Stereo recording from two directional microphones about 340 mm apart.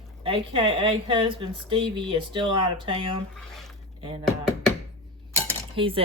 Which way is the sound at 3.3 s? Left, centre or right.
Centre.